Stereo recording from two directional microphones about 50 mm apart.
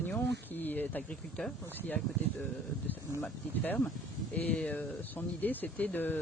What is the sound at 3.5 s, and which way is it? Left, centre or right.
Speech, left.